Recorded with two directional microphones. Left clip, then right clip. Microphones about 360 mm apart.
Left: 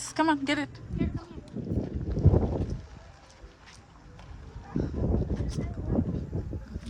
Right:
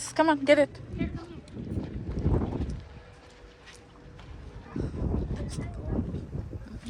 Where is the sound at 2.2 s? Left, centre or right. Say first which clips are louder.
Left 4 dB; centre.